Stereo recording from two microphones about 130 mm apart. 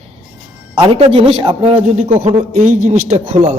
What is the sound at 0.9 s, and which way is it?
Speech, 45° right (ahead or behind).